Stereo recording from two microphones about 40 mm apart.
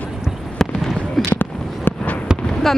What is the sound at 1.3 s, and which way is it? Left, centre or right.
Fireworks, left.